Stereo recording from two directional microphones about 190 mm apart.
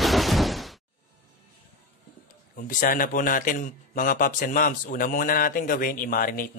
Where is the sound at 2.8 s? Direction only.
45° left (ahead or behind).